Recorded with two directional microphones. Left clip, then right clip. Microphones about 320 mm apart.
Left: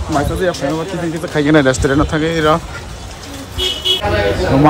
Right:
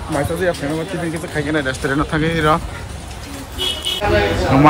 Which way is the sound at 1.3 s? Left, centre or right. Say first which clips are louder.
Left 9 dB; left.